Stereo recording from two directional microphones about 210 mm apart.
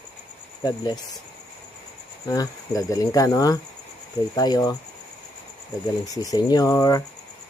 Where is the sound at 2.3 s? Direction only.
15° left (ahead or behind).